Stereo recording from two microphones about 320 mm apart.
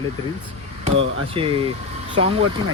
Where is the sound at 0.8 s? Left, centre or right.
Centre.